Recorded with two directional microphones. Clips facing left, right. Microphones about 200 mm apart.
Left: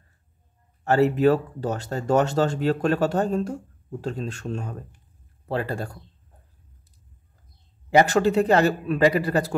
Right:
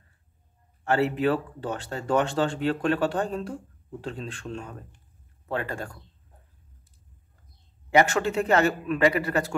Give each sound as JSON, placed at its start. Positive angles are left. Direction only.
{"t": 0.8, "sound": "speech", "side_deg": 40}
{"t": 7.9, "sound": "speech", "side_deg": 35}